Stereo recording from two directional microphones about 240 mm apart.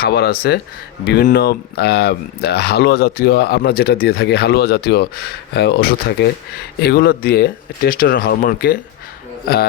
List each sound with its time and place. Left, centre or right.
0.0 s speech: left